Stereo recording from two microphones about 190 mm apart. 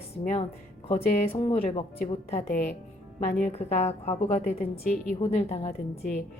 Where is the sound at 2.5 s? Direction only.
55° left (ahead or behind).